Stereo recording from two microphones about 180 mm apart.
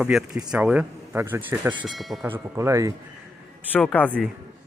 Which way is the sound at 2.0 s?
Centre (ahead or behind).